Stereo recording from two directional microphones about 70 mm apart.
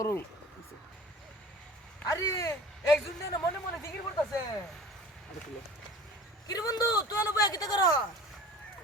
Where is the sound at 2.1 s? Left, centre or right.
Left.